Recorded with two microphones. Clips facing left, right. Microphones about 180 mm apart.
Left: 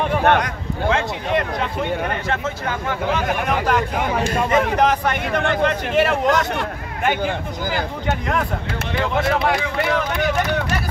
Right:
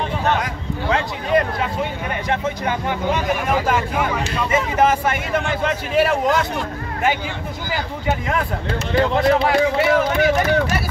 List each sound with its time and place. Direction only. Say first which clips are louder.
0.4 s speech: left 1 dB; centre (ahead or behind)
2.2 s speech: right 2 dB; 15° right (ahead or behind)
3.5 s speech: even; 5° right (ahead or behind)
4.2 s speech: left 3 dB; 50° left (ahead or behind)
4.7 s speech: right 1 dB; 5° right (ahead or behind)
7.7 s speech: right 2 dB; centre (ahead or behind)